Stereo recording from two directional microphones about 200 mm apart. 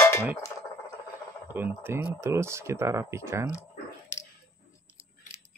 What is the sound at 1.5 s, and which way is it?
Speech, 10° right (ahead or behind).